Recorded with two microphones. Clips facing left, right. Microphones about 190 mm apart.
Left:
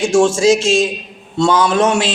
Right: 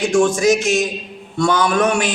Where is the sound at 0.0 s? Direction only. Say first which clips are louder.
Left 3 dB; 30° left (ahead or behind).